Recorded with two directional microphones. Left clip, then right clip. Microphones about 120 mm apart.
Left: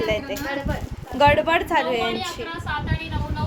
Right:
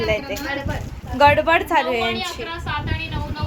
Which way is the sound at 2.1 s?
20° left (ahead or behind).